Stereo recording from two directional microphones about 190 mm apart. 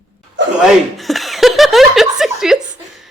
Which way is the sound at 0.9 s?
Centre (ahead or behind).